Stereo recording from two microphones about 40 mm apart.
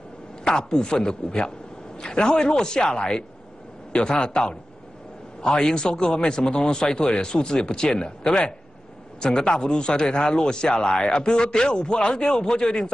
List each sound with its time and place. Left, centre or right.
0.4 s speech: centre